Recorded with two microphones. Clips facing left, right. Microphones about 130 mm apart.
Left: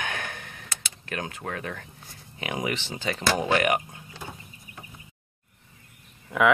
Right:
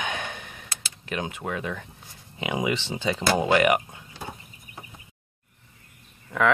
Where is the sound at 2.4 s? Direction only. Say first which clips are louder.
Right 3 dB; 20° right (ahead or behind).